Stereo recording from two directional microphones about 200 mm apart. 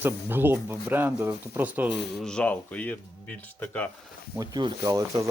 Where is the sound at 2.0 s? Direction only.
5° left (ahead or behind).